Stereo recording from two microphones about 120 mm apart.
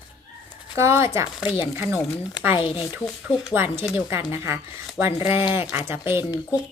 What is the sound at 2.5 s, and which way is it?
Speech, 45° left (ahead or behind).